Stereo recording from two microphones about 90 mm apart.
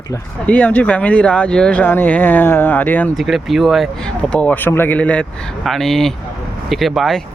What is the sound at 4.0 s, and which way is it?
Speech, 10° left (ahead or behind).